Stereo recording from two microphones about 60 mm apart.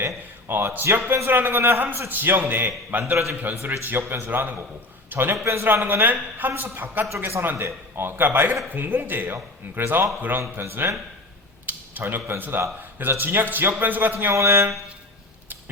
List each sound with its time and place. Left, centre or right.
0.4 s speech: right
1.0 s speech: right
3.8 s speech: right
4.3 s a man's voice: right
5.8 s a man's voice: right
14.3 s a man's voice: right